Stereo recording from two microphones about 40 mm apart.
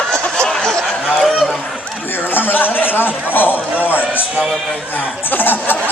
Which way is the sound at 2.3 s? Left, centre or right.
Left.